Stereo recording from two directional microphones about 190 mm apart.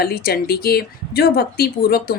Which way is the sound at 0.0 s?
55° left (ahead or behind).